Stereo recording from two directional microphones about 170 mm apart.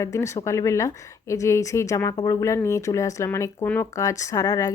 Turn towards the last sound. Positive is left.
turn(degrees=20)  # may be behind; listen again after turning